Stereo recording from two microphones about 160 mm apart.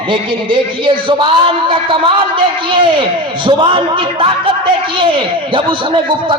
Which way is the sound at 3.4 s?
30° right (ahead or behind).